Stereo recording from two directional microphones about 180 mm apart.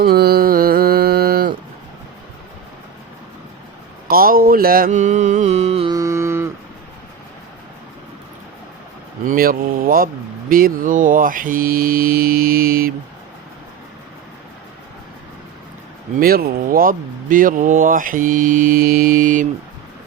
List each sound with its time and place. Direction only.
0.0 s mantra: 60° right (ahead or behind)
4.1 s speech: 55° right (ahead or behind); by 5.9 s 35° right (ahead or behind)
5.9 s mantra: 15° right (ahead or behind)
9.2 s speech: 55° right (ahead or behind)
16.1 s speech: 55° right (ahead or behind)